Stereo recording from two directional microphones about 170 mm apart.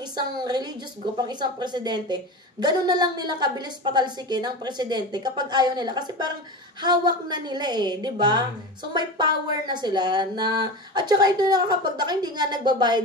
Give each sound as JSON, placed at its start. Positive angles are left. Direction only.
{"t": 0.1, "sound": "speech", "side_deg": -25}